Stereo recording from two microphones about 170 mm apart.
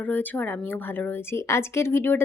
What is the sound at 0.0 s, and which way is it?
A woman's voice, 10° left (ahead or behind).